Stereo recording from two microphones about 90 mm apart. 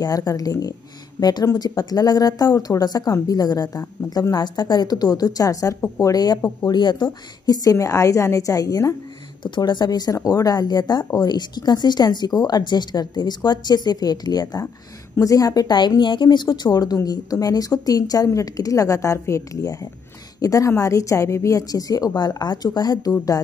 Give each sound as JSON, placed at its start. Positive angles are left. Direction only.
{"t": 0.0, "sound": "a woman's voice", "side_deg": 45}
{"t": 7.4, "sound": "a woman's voice", "side_deg": 45}
{"t": 9.4, "sound": "a woman's voice", "side_deg": 55}
{"t": 16.0, "sound": "a woman's voice", "side_deg": 60}